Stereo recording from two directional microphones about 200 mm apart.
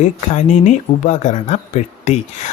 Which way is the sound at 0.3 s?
35° left (ahead or behind).